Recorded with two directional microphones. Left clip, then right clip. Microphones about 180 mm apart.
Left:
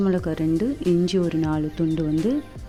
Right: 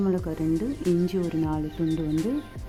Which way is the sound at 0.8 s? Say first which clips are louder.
Left 4 dB; 5° left (ahead or behind).